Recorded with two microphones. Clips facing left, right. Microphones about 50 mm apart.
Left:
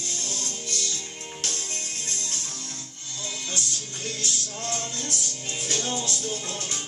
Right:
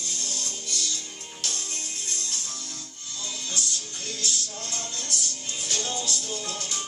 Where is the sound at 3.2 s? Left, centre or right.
Left.